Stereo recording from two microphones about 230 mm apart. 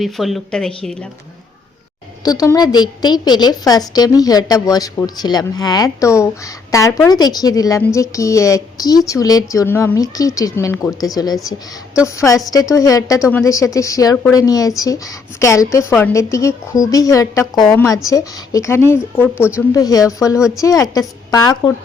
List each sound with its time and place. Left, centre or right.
0.0 s speech: centre
2.2 s a woman's voice: centre
20.3 s speech: centre
20.6 s a woman's voice: centre